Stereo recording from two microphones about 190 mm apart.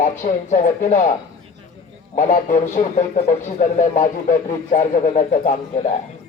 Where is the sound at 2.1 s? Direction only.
45° left (ahead or behind).